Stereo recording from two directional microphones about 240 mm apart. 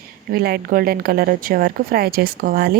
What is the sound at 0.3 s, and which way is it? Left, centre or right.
Speech, right.